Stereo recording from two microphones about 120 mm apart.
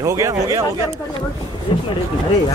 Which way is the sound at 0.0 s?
25° right (ahead or behind).